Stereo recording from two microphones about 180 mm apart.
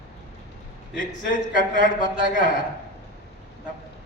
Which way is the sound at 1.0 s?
50° left (ahead or behind).